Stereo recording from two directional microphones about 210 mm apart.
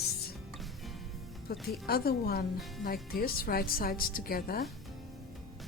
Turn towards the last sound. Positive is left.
turn(degrees=45)  # may be behind; listen again after turning